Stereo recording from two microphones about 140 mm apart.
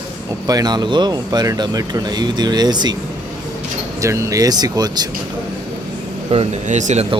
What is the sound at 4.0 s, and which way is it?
Speech, 20° right (ahead or behind).